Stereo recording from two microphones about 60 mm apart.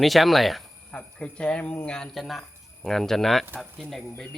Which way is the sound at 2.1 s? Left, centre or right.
Centre.